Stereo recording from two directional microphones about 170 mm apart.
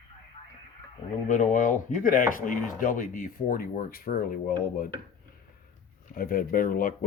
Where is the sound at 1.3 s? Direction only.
50° left (ahead or behind).